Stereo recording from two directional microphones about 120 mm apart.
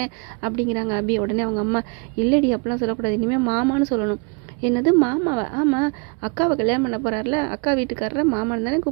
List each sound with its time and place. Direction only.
0.0 s a woman's voice: 30° right (ahead or behind)